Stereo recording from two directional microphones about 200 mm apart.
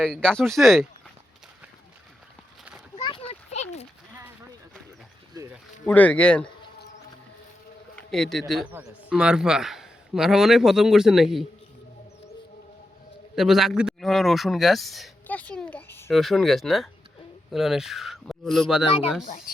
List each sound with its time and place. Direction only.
0.0 s a man's voice: 5° left (ahead or behind)
2.9 s a sound: 25° left (ahead or behind)
5.8 s a man's voice: 5° left (ahead or behind)
7.9 s a man's voice: centre (ahead or behind)
13.3 s a man's voice: centre (ahead or behind)